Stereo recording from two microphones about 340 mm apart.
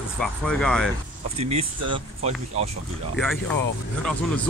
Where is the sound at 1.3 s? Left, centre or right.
Centre.